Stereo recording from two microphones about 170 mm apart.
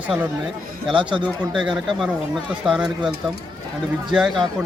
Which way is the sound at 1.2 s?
5° right (ahead or behind).